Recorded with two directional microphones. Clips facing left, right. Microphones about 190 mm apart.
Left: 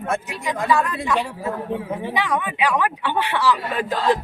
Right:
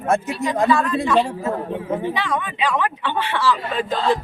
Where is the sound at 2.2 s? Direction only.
10° left (ahead or behind).